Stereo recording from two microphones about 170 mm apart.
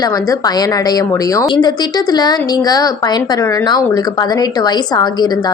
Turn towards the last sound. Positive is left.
turn(degrees=25)  # may be behind; listen again after turning